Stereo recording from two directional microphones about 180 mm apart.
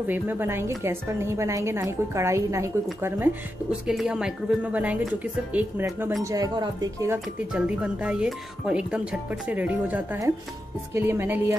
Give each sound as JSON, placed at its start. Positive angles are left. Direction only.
{"t": 0.0, "sound": "a woman's voice", "side_deg": -10}
{"t": 3.8, "sound": "a woman's voice", "side_deg": -5}
{"t": 7.5, "sound": "a woman's voice", "side_deg": -5}